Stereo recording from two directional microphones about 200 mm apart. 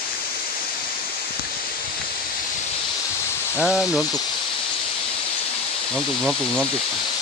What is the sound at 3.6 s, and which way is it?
Speech, 5° right (ahead or behind).